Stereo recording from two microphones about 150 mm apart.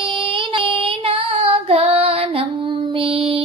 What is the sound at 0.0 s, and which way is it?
Child singing, 35° right (ahead or behind).